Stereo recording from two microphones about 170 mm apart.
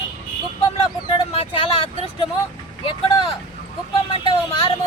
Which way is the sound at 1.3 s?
35° left (ahead or behind).